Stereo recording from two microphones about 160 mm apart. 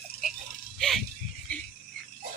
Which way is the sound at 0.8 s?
Centre (ahead or behind).